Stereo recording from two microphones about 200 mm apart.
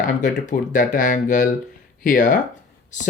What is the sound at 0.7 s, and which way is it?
Speech, 40° left (ahead or behind).